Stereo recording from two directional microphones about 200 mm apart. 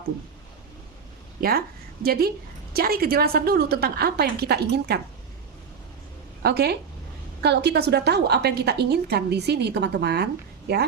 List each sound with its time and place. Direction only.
1.4 s a woman's voice: 50° right (ahead or behind)
6.4 s a woman's voice: 55° right (ahead or behind)